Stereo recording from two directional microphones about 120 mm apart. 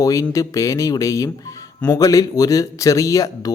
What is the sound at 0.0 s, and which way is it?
Speech, 25° left (ahead or behind).